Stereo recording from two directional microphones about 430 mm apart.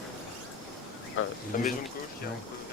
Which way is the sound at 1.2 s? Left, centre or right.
Centre.